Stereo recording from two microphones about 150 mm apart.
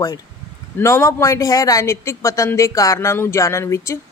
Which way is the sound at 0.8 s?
15° left (ahead or behind).